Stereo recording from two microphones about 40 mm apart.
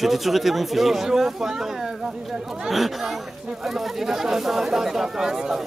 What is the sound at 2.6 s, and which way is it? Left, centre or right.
A man's voice, centre.